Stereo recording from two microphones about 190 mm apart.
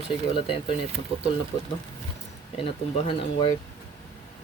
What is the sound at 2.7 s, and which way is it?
Speech, 30° left (ahead or behind).